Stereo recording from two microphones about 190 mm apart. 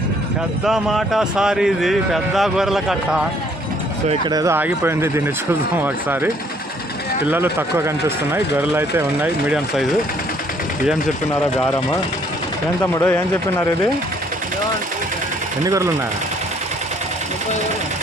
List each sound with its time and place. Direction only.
0.6 s speech: centre (ahead or behind)
4.3 s speech: 15° right (ahead or behind)
12.8 s speech: 10° left (ahead or behind)
15.6 s speech: 15° right (ahead or behind)